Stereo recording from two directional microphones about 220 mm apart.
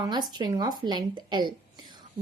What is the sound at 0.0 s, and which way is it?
Speech, 20° right (ahead or behind).